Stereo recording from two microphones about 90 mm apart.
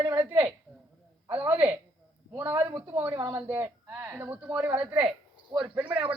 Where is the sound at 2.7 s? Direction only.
35° right (ahead or behind); by 6.2 s 15° right (ahead or behind).